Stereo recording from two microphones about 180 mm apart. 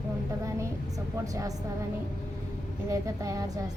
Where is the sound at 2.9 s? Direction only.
20° right (ahead or behind).